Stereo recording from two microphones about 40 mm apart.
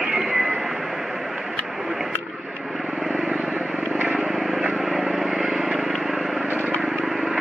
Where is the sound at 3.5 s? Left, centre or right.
Right.